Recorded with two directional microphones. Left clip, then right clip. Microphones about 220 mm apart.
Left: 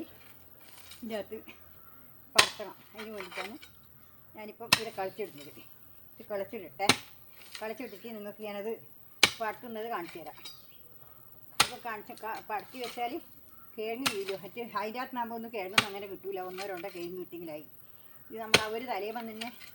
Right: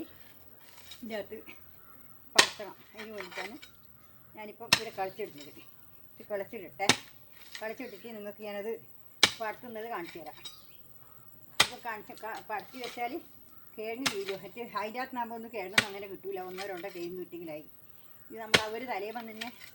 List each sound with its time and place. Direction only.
0.6 s a sound: 15° left (ahead or behind)
2.3 s speech: 15° left (ahead or behind)
11.8 s speech: 15° left (ahead or behind)